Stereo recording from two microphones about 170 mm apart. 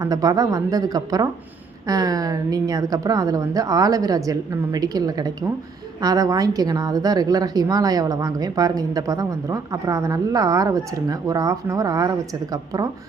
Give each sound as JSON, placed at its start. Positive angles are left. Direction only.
{"t": 0.0, "sound": "a woman's voice", "side_deg": -20}